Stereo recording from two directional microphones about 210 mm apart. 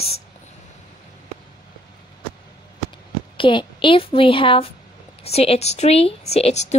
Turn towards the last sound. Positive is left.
turn(degrees=30)  # may be behind; listen again after turning